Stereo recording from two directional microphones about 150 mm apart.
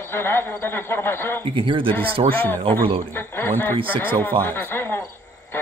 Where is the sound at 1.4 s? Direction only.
35° right (ahead or behind).